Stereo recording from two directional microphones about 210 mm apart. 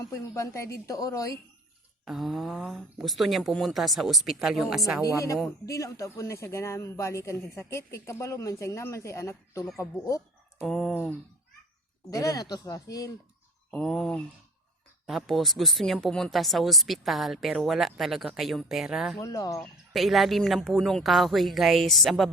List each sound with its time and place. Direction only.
0.1 s speech: 15° left (ahead or behind)
2.0 s speech: centre (ahead or behind)
5.0 s speech: 15° left (ahead or behind)
10.6 s speech: centre (ahead or behind)
12.1 s speech: 15° left (ahead or behind)
13.7 s speech: 5° left (ahead or behind)
19.2 s speech: 15° left (ahead or behind)
19.9 s speech: centre (ahead or behind)